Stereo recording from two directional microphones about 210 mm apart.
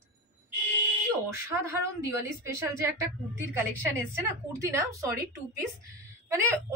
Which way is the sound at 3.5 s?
10° right (ahead or behind).